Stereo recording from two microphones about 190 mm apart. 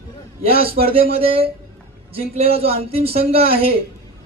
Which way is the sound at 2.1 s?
30° right (ahead or behind).